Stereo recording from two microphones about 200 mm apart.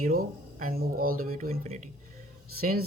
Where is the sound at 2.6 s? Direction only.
50° right (ahead or behind).